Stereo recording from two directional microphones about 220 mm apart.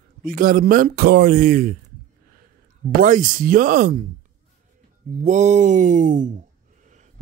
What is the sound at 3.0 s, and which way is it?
Speech, 40° right (ahead or behind).